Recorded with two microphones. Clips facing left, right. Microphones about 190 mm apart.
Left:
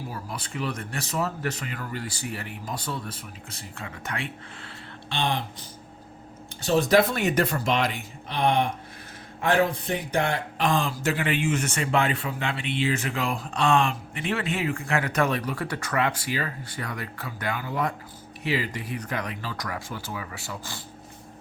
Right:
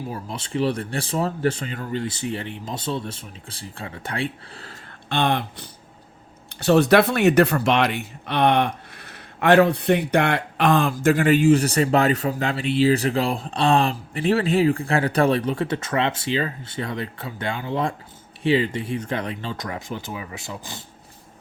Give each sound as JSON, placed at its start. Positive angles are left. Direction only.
{"t": 0.1, "sound": "speech", "side_deg": -25}
{"t": 5.0, "sound": "a man's voice", "side_deg": -55}